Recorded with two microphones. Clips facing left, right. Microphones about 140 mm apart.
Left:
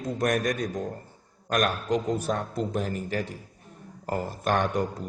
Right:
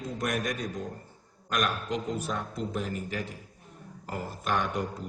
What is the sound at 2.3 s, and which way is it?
Speech, 40° left (ahead or behind).